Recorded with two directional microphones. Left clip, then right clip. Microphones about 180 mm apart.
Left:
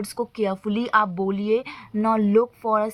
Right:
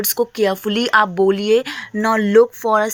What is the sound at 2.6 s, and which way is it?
Speech, 20° right (ahead or behind).